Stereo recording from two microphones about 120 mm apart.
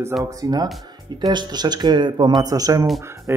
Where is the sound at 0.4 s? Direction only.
35° right (ahead or behind).